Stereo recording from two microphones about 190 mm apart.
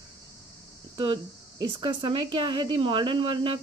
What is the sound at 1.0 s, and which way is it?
Speech, 25° right (ahead or behind).